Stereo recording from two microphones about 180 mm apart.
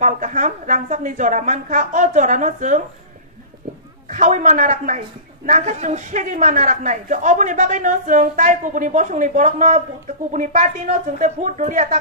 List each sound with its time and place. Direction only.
0.0 s a man's voice: 45° right (ahead or behind)
4.1 s a man's voice: 45° right (ahead or behind)